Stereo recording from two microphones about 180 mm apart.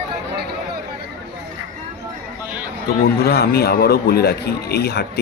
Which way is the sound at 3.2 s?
60° left (ahead or behind).